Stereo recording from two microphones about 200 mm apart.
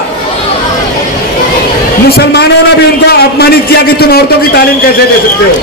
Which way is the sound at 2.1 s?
55° left (ahead or behind).